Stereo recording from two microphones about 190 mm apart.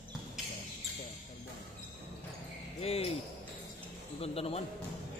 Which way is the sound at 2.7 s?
30° left (ahead or behind).